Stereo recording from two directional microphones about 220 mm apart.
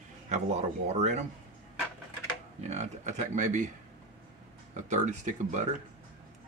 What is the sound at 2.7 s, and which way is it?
Speech, 30° right (ahead or behind).